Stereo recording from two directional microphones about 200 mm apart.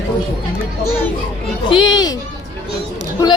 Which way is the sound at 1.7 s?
20° left (ahead or behind).